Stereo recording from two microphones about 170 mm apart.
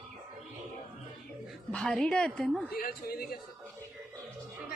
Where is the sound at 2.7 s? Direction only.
60° left (ahead or behind).